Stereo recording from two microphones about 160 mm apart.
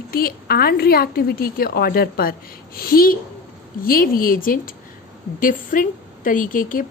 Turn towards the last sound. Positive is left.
turn(degrees=60)  # may be behind; listen again after turning